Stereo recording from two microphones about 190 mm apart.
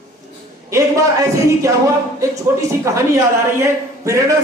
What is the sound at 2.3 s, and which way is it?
A man's voice, 15° right (ahead or behind).